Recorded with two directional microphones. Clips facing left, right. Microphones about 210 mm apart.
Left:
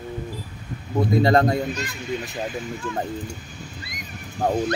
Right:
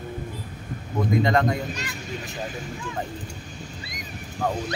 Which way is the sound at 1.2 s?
35° left (ahead or behind).